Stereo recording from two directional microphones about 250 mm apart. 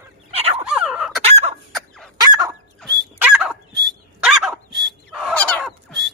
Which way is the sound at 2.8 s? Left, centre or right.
Centre.